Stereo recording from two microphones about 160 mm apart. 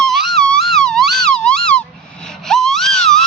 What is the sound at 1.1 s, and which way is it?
Police car, 5° left (ahead or behind).